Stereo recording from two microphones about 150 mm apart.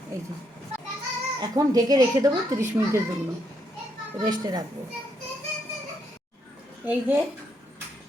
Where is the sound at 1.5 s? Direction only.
25° right (ahead or behind).